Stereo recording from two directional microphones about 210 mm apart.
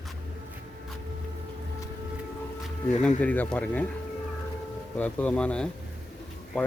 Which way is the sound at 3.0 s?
5° left (ahead or behind).